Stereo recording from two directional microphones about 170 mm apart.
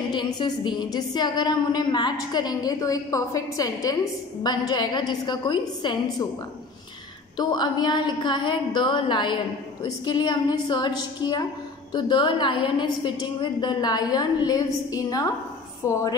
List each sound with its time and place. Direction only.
0.1 s a woman's voice: 25° left (ahead or behind)
7.3 s a woman's voice: 25° left (ahead or behind)